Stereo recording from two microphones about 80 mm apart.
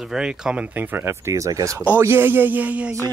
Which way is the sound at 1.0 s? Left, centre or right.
Right.